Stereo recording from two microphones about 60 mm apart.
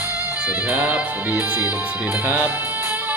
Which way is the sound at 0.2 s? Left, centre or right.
Right.